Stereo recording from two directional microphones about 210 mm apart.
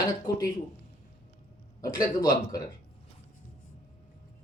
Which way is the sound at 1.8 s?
20° left (ahead or behind).